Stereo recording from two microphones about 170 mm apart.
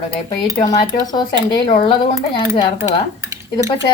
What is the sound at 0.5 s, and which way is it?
A woman's voice, 25° left (ahead or behind).